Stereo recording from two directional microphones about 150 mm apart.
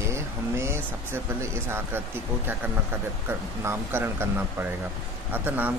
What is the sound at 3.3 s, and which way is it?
Speech, 15° right (ahead or behind).